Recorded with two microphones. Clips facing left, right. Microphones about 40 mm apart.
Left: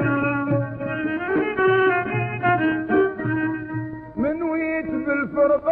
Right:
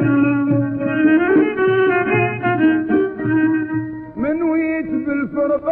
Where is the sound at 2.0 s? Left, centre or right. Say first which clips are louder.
Right 9 dB; right.